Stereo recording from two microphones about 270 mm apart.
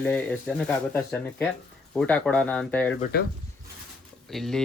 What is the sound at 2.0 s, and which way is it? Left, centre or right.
Speech, centre.